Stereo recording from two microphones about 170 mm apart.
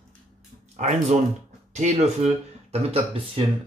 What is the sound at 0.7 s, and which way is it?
Speech, 40° right (ahead or behind).